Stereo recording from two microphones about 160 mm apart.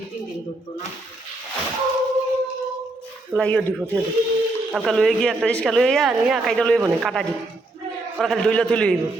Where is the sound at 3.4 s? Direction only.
5° left (ahead or behind).